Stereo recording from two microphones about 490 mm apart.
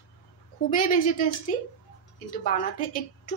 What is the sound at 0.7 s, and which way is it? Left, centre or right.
Speech, centre.